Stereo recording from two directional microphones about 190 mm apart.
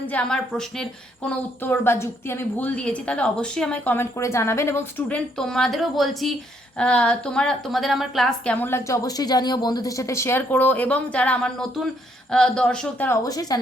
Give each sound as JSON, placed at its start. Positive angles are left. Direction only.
{"t": 0.1, "sound": "a woman's voice", "side_deg": 5}